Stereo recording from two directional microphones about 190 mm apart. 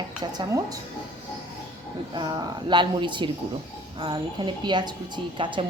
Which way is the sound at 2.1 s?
20° right (ahead or behind).